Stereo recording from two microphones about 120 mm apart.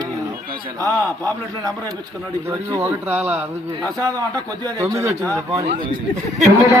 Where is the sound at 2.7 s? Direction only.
20° right (ahead or behind).